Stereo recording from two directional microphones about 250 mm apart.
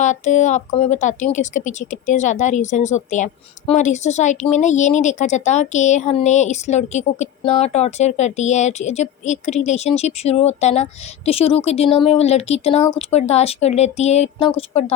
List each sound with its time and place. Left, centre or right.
0.0 s speech: left